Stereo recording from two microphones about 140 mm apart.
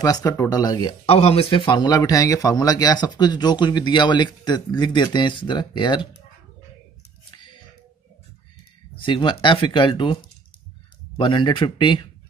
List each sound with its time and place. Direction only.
0.0 s speech: 25° left (ahead or behind)
1.0 s a man's voice: 45° left (ahead or behind)
8.9 s a man's voice: 35° left (ahead or behind)
11.1 s a man's voice: 35° left (ahead or behind)